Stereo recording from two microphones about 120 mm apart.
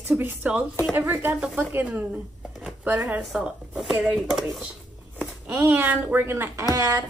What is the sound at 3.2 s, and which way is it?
Speech, 5° right (ahead or behind).